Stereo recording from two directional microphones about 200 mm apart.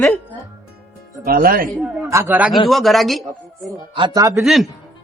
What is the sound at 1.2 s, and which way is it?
Speech, 45° right (ahead or behind).